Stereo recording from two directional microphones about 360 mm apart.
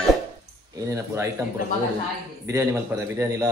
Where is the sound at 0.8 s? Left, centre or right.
Centre.